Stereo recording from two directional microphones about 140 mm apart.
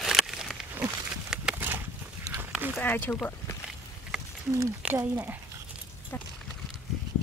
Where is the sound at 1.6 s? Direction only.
20° right (ahead or behind).